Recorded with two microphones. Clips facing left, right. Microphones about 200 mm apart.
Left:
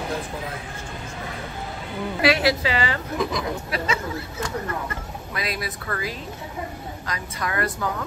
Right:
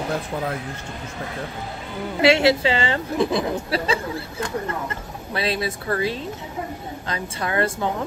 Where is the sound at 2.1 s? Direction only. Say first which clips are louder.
Right 4 dB; 25° right (ahead or behind).